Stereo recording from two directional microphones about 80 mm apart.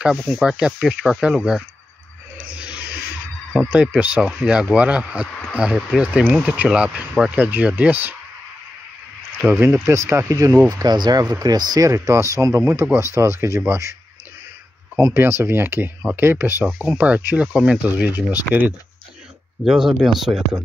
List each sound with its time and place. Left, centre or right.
0.0 s speech: centre
2.3 s music: centre
3.6 s speech: centre
9.4 s speech: right
10.3 s speech: right
15.0 s speech: right
16.7 s speech: centre
17.0 s speech: right
17.5 s speech: centre
19.6 s speech: centre